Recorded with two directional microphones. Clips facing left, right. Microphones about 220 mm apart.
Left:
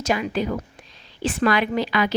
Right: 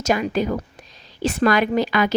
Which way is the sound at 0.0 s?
45° right (ahead or behind).